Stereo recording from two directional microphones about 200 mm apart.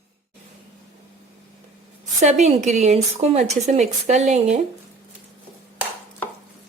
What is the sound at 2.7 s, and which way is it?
Speech, 35° right (ahead or behind).